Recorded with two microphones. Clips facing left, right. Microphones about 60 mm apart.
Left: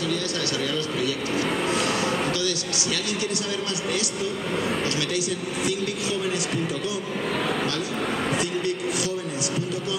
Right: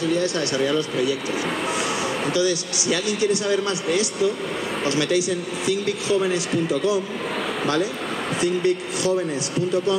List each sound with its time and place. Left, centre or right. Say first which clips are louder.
0.0 s a man's voice: right 5 dB; right
2.3 s a man's voice: right 5 dB; right
8.4 s a man's voice: right 5 dB; right